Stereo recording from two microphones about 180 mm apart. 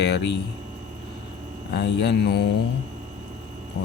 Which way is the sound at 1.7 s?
75° left (ahead or behind).